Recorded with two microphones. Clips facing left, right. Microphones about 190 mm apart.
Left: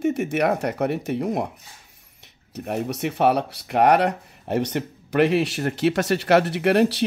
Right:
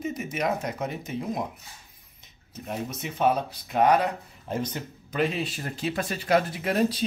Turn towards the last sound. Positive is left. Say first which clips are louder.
# left 7 dB
turn(degrees=75)  # may be behind; listen again after turning